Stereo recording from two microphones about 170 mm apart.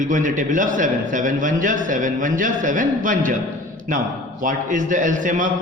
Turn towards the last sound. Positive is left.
turn(degrees=-50)  # may be behind; listen again after turning